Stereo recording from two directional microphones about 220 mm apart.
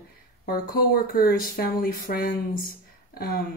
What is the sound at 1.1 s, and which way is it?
Speech, 40° left (ahead or behind).